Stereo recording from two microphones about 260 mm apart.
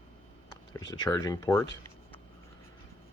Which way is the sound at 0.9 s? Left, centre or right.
Centre.